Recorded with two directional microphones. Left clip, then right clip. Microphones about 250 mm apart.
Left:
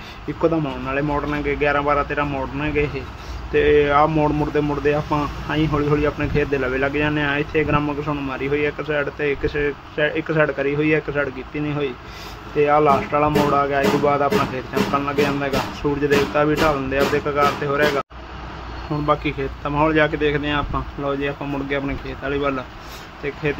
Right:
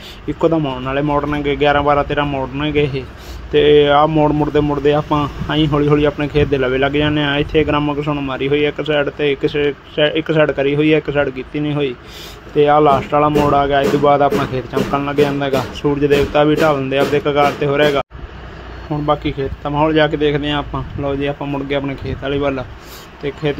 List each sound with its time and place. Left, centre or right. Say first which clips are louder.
0.4 s speech: right 5 dB; centre
19.0 s speech: right 3 dB; centre